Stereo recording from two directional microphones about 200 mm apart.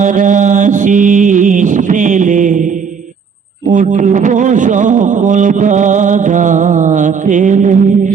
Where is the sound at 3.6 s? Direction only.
40° right (ahead or behind).